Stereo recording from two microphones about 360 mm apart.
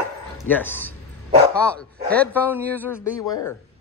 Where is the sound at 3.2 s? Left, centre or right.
Left.